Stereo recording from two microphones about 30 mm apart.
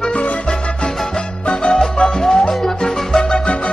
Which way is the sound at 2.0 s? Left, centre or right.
Centre.